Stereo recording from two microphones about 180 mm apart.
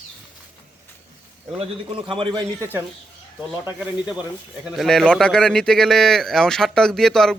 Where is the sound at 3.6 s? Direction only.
5° right (ahead or behind).